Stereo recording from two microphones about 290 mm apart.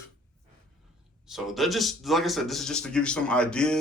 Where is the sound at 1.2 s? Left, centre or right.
Centre.